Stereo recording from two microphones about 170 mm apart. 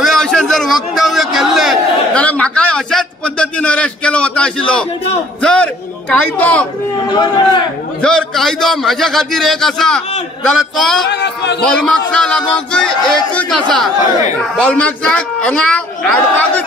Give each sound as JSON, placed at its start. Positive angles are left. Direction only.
{"t": 0.0, "sound": "a man's voice", "side_deg": 0}
{"t": 7.1, "sound": "a man's voice", "side_deg": 25}
{"t": 8.0, "sound": "a man's voice", "side_deg": 5}
{"t": 11.1, "sound": "a man's voice", "side_deg": 90}
{"t": 11.6, "sound": "a man's voice", "side_deg": 5}
{"t": 14.6, "sound": "a woman's voice", "side_deg": 5}